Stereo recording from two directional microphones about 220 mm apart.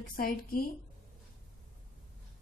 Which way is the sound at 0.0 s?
40° left (ahead or behind).